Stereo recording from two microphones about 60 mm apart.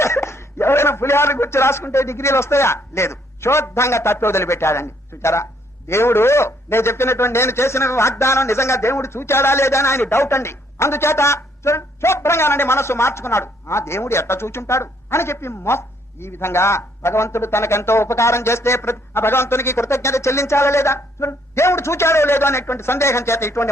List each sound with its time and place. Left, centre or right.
0.0 s a man's voice: left